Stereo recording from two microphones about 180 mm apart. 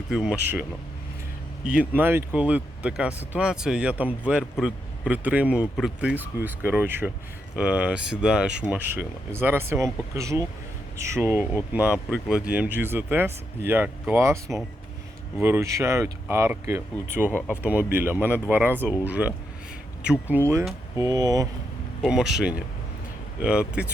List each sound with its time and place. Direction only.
0.1 s speech: 5° right (ahead or behind)
1.6 s speech: 5° right (ahead or behind)
17.3 s speech: 10° left (ahead or behind)
17.6 s speech: 10° right (ahead or behind)
22.0 s speech: 5° right (ahead or behind)